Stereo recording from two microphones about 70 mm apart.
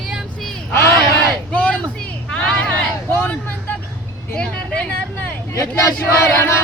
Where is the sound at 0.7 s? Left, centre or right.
Left.